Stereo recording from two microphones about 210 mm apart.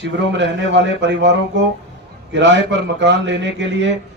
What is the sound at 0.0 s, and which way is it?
A man's voice, 55° right (ahead or behind).